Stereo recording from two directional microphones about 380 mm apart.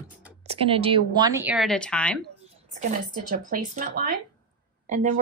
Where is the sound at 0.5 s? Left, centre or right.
Centre.